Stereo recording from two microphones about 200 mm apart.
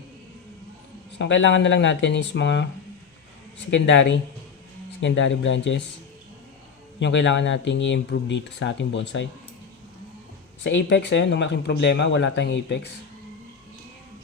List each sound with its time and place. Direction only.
1.2 s speech: 65° left (ahead or behind)
3.7 s speech: 65° left (ahead or behind)
7.0 s speech: 60° left (ahead or behind)
10.6 s speech: 65° left (ahead or behind)